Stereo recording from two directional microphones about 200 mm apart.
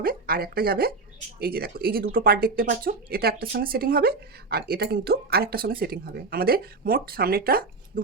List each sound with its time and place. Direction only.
0.0 s speech: 45° right (ahead or behind)